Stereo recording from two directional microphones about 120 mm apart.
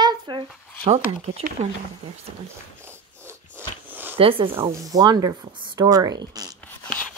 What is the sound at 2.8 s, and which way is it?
Dog, 20° right (ahead or behind).